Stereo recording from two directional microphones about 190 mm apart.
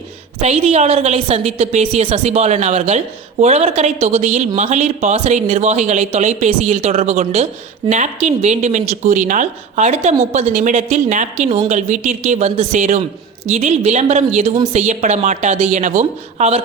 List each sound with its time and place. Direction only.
0.4 s speech: 35° right (ahead or behind)